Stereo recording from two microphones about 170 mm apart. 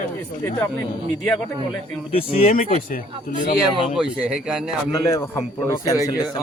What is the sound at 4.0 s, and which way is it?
Speech, 5° right (ahead or behind).